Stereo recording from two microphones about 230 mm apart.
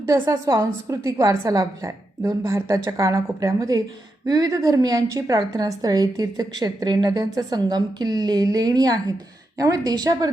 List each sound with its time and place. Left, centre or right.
0.0 s a woman's voice: centre